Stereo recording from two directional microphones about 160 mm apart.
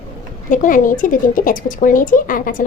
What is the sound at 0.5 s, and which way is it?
Speech, 55° left (ahead or behind).